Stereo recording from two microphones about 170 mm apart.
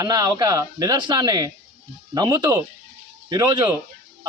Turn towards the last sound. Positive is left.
turn(degrees=-20)  # may be behind; listen again after turning